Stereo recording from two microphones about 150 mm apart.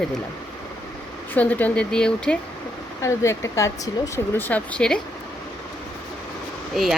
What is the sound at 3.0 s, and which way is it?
Speech, 20° left (ahead or behind).